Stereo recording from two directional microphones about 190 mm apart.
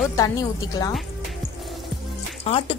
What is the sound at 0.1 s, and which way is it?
Speech, 15° left (ahead or behind).